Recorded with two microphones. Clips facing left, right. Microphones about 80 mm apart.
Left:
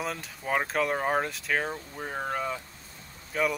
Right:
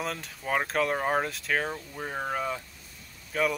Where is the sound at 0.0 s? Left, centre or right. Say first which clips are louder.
Even; centre.